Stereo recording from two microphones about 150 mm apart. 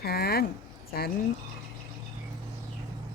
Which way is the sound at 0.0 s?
90° left.